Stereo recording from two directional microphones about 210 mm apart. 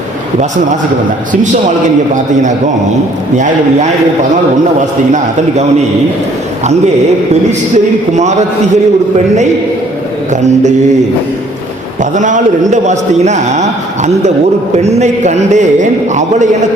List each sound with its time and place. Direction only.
3.3 s a man's voice: 35° right (ahead or behind)
8.1 s a man's voice: 35° right (ahead or behind)
12.1 s a man's voice: 35° right (ahead or behind)
14.8 s a man's voice: 30° right (ahead or behind)